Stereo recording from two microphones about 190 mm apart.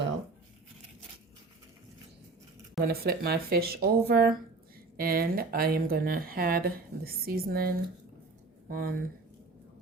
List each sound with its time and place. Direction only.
2.8 s speech: 55° right (ahead or behind)
8.7 s speech: 50° right (ahead or behind)